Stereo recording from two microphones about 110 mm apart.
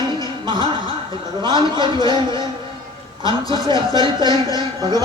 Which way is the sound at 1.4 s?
45° right (ahead or behind).